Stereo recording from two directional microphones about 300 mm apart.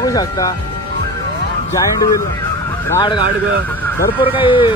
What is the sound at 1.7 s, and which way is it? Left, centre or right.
Speech, centre.